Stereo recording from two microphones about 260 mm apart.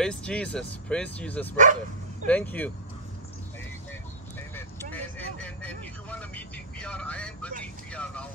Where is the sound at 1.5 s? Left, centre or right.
Right.